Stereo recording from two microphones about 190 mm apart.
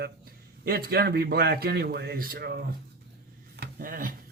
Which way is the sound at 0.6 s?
55° right (ahead or behind).